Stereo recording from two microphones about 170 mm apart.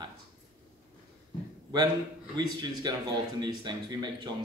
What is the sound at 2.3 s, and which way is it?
Speech, 25° right (ahead or behind).